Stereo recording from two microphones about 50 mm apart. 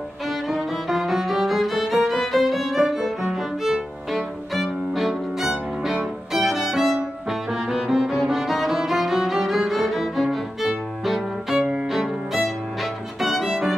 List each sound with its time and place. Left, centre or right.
0.3 s music: centre